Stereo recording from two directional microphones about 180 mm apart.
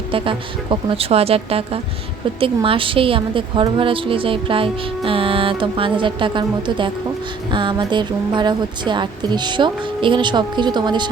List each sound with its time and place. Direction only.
0.1 s a woman's voice: 30° right (ahead or behind)